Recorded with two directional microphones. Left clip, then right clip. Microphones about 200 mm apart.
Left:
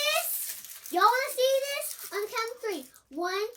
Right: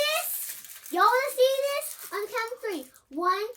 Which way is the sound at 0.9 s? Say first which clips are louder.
Right 1 dB; 15° right (ahead or behind).